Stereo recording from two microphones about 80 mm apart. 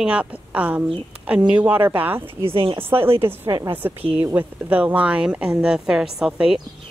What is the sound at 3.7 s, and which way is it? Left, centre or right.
A woman's voice, right.